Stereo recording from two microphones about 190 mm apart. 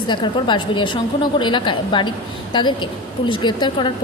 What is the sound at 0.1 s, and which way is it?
A woman's voice, 25° left (ahead or behind).